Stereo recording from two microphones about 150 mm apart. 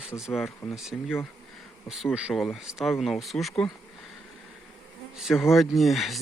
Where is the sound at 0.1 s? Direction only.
5° right (ahead or behind).